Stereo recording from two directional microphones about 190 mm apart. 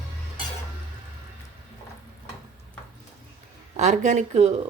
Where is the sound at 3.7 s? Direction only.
40° right (ahead or behind).